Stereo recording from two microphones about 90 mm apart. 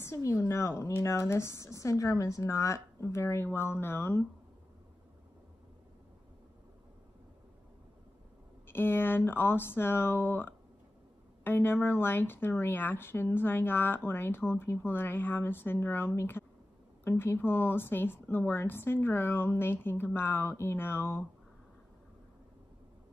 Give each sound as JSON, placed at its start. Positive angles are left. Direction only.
{"t": 0.0, "sound": "speech", "side_deg": 35}
{"t": 8.6, "sound": "speech", "side_deg": 25}